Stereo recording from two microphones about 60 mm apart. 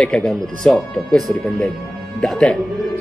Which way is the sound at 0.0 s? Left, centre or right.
Centre.